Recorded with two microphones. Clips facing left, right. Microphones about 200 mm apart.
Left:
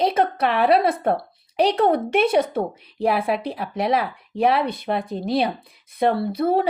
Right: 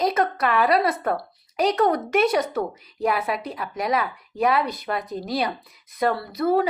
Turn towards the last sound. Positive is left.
turn(degrees=30)  # may be behind; listen again after turning